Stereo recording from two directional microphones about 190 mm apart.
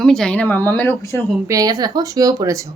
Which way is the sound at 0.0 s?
5° left (ahead or behind).